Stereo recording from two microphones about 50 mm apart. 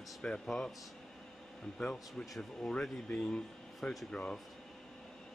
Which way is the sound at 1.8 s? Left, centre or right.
Centre.